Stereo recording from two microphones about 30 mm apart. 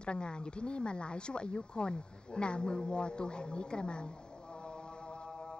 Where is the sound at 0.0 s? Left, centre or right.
Left.